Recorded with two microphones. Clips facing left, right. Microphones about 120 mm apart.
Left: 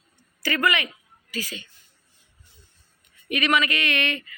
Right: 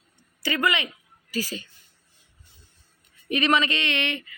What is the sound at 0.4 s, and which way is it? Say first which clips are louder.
Speech: left 1 dB; 20° right (ahead or behind).